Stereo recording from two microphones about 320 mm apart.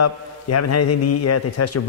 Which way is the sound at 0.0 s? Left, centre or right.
Left.